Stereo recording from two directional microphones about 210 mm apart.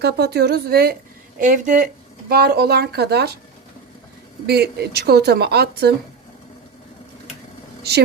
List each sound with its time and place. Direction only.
0.0 s speech: 50° right (ahead or behind)
2.3 s speech: 50° right (ahead or behind)
4.4 s speech: 50° right (ahead or behind)